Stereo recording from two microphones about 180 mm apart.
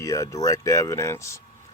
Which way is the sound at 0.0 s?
15° left (ahead or behind).